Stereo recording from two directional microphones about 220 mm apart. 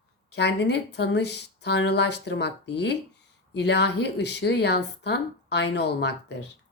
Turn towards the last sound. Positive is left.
turn(degrees=50)  # may be behind; listen again after turning